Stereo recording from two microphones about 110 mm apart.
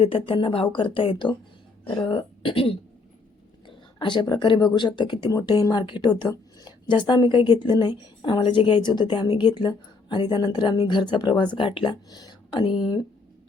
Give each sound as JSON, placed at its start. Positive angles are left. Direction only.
{"t": 0.0, "sound": "a woman's voice", "side_deg": 55}
{"t": 5.3, "sound": "a woman's voice", "side_deg": 35}